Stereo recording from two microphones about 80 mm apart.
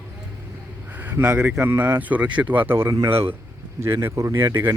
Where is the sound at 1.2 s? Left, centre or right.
Centre.